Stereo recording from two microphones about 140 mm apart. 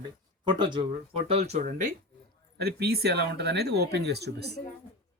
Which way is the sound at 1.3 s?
45° right (ahead or behind).